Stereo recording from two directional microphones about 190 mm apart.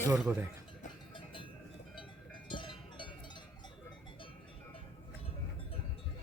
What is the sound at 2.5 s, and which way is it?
Cowbell, 25° left (ahead or behind).